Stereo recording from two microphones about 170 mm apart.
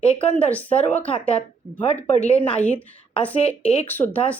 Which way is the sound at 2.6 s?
10° left (ahead or behind).